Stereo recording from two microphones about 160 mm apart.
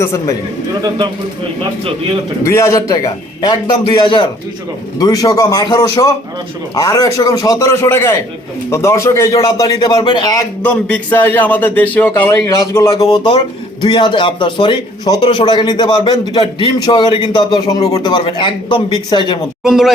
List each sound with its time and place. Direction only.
0.0 s a man's voice: 20° left (ahead or behind)
2.4 s a man's voice: 20° left (ahead or behind)
10.6 s a man's voice: 10° left (ahead or behind); by 19.4 s 30° left (ahead or behind)
19.6 s speech: 5° right (ahead or behind)